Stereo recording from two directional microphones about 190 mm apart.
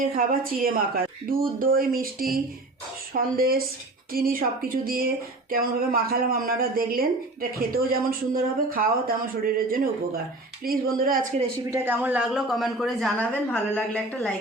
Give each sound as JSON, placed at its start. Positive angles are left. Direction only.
{"t": 0.0, "sound": "speech", "side_deg": -50}
{"t": 11.7, "sound": "a man's voice", "side_deg": -10}